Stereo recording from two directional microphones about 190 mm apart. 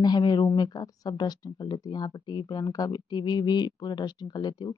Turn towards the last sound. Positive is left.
turn(degrees=20)  # may be behind; listen again after turning